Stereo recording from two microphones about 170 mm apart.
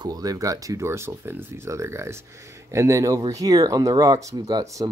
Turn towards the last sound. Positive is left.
turn(degrees=-20)  # may be behind; listen again after turning